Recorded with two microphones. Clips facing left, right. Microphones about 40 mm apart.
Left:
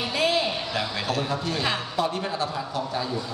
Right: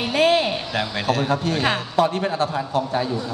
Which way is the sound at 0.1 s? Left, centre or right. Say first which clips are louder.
Right 7 dB; right.